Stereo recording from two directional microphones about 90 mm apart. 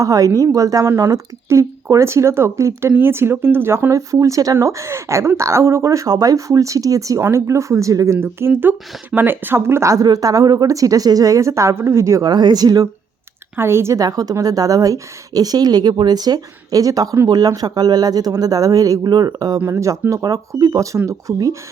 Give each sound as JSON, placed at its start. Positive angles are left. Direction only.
{"t": 0.0, "sound": "speech", "side_deg": -40}
{"t": 12.3, "sound": "speech", "side_deg": -50}
{"t": 13.6, "sound": "speech", "side_deg": -30}
{"t": 14.0, "sound": "speech", "side_deg": -45}